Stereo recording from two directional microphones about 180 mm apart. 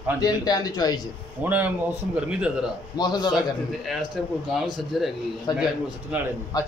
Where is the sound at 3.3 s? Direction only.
Centre (ahead or behind).